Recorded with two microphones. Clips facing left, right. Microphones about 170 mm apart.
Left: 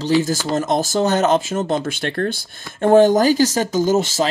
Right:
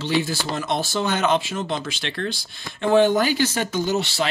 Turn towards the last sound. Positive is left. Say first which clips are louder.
# left 6 dB
turn(degrees=45)  # may be behind; listen again after turning